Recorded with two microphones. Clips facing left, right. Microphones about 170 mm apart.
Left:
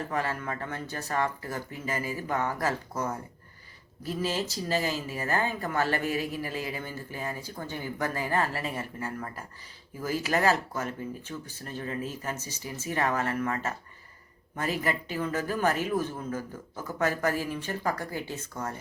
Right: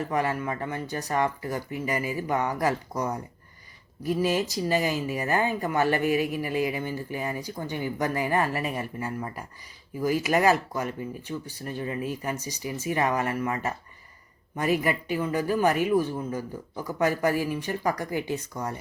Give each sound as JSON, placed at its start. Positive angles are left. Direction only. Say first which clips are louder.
{"t": 0.1, "sound": "speech", "louder": "right 4 dB", "side_deg": -15}